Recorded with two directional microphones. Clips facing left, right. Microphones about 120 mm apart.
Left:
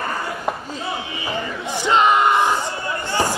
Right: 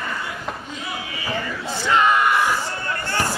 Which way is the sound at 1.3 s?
20° left (ahead or behind).